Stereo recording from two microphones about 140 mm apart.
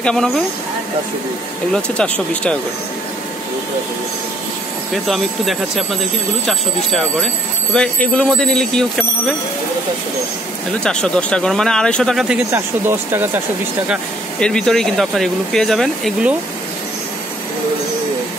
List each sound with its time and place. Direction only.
0.0 s speech: 5° left (ahead or behind)
2.0 s speech: 10° left (ahead or behind)
4.9 s speech: centre (ahead or behind)
10.8 s speech: 5° left (ahead or behind)
12.5 s speech: 15° right (ahead or behind)
14.4 s speech: 5° left (ahead or behind)